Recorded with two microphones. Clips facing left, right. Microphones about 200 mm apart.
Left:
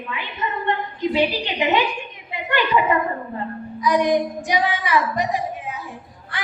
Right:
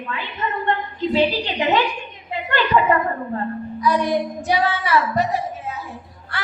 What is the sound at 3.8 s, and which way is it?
A woman's voice, 15° left (ahead or behind).